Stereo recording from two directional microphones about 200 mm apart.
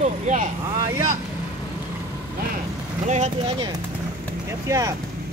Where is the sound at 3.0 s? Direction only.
35° right (ahead or behind).